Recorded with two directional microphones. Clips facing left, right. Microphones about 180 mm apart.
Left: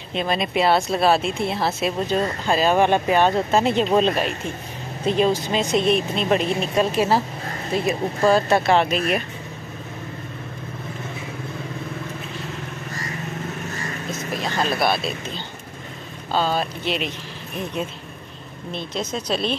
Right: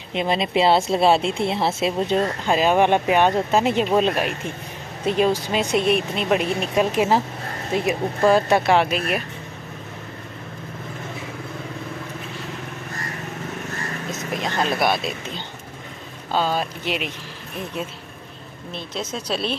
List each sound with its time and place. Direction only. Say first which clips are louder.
0.1 s a woman's voice: right 2 dB; 20° right (ahead or behind); by 9.2 s 5° right (ahead or behind)
14.1 s vehicle: even; 15° right (ahead or behind)
14.6 s speech: even; 15° right (ahead or behind)
18.7 s speech: left 2 dB; 5° right (ahead or behind)